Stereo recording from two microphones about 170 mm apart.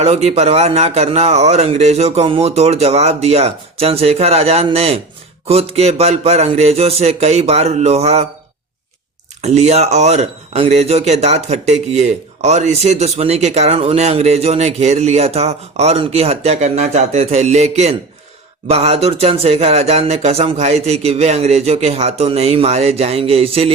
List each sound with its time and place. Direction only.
0.0 s speech: 40° right (ahead or behind)
9.4 s speech: 40° right (ahead or behind)